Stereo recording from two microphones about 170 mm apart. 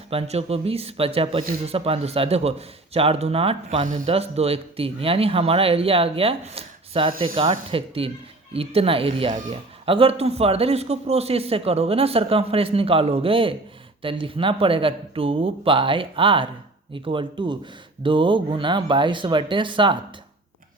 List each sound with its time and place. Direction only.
0.1 s a man's voice: 35° right (ahead or behind)
3.8 s speech: 50° right (ahead or behind)
4.1 s a man's voice: 35° right (ahead or behind)